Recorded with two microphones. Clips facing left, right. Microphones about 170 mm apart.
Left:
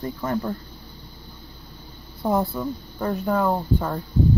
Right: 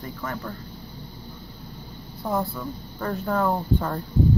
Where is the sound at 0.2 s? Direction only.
25° left (ahead or behind).